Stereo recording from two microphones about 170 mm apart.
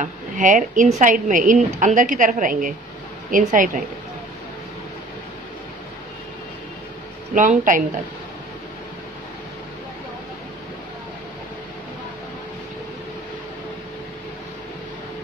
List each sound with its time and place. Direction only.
0.0 s a woman's voice: 50° right (ahead or behind)
7.3 s a woman's voice: 50° right (ahead or behind)